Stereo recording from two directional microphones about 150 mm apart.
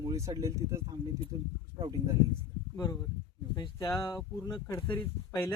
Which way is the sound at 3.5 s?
25° left (ahead or behind).